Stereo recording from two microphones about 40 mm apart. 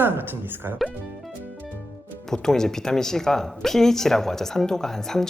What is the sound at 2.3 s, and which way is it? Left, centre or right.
Speech, centre.